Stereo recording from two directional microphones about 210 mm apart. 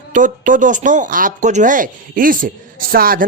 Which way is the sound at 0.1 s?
40° right (ahead or behind).